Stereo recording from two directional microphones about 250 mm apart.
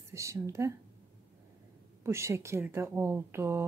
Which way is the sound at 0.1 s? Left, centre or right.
Centre.